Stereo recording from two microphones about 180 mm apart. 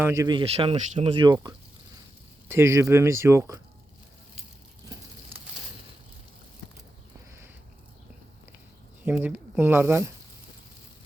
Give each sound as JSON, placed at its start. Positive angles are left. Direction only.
{"t": 0.0, "sound": "speech", "side_deg": -15}
{"t": 2.5, "sound": "speech", "side_deg": -15}
{"t": 9.0, "sound": "speech", "side_deg": -10}